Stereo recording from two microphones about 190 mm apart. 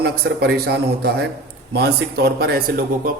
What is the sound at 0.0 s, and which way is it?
A man's voice, 60° right (ahead or behind).